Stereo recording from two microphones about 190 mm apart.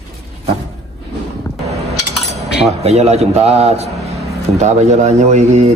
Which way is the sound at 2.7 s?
35° right (ahead or behind).